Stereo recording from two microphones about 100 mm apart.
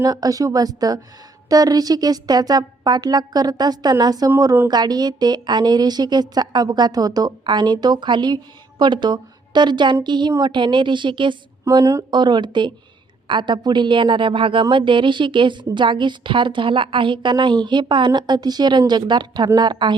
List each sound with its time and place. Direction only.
0.0 s a woman's voice: 40° right (ahead or behind)
11.7 s a woman's voice: 35° right (ahead or behind)
12.1 s a woman's voice: 50° right (ahead or behind)